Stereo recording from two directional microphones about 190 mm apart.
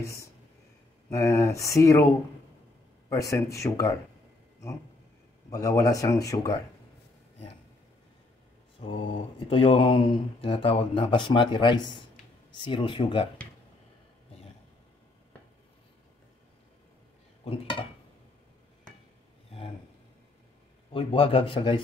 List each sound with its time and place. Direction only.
0.0 s speech: 15° left (ahead or behind)
3.1 s speech: 15° left (ahead or behind)
5.5 s speech: 15° left (ahead or behind)
8.8 s speech: 30° left (ahead or behind)
20.9 s speech: 30° left (ahead or behind)